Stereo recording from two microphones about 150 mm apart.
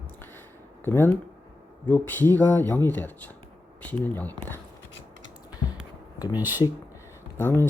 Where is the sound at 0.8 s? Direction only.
15° left (ahead or behind).